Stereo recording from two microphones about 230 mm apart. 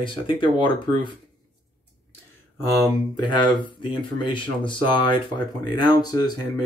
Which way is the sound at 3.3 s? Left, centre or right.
Centre.